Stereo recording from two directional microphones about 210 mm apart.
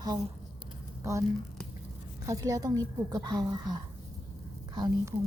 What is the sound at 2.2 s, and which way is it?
A woman's voice, 15° right (ahead or behind).